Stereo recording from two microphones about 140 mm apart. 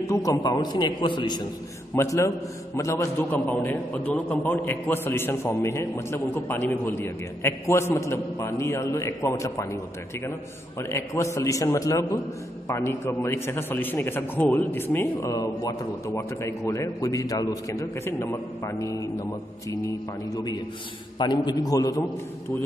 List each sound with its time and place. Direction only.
0.0 s a man's voice: 20° left (ahead or behind)
2.0 s a man's voice: 20° left (ahead or behind)
10.8 s a man's voice: 20° left (ahead or behind)
21.2 s a man's voice: 30° left (ahead or behind)